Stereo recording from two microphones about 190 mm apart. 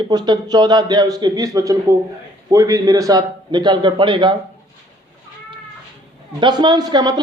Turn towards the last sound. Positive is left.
turn(degrees=-20)  # may be behind; listen again after turning